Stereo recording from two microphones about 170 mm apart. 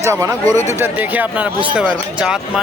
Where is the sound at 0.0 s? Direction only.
15° right (ahead or behind).